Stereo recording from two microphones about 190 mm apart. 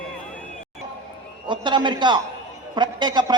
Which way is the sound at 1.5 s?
25° right (ahead or behind).